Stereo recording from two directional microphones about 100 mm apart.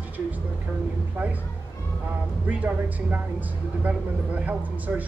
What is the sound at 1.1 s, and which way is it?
Speech, 15° right (ahead or behind).